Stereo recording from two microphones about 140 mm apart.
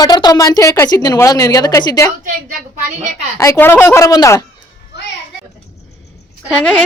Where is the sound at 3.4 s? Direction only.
20° left (ahead or behind).